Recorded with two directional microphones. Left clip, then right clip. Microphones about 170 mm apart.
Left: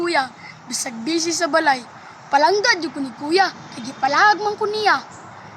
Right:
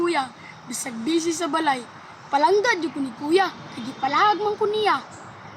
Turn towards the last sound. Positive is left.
turn(degrees=10)  # may be behind; listen again after turning